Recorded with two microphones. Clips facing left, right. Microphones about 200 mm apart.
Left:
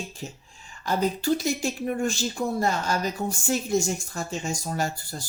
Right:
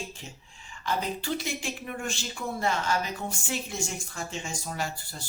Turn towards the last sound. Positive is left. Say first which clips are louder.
# left 5 dB
turn(degrees=40)  # may be behind; listen again after turning